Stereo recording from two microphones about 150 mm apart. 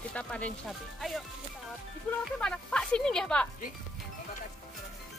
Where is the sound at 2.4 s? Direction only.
5° left (ahead or behind).